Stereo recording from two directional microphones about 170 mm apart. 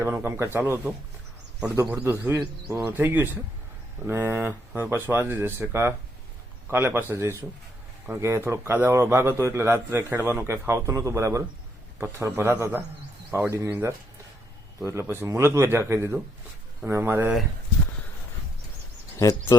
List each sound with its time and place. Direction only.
0.0 s a man's voice: 15° right (ahead or behind)
1.6 s a man's voice: 15° right (ahead or behind)